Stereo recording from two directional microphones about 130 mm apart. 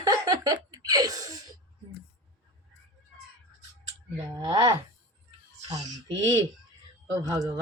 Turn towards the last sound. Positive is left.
turn(degrees=-30)  # may be behind; listen again after turning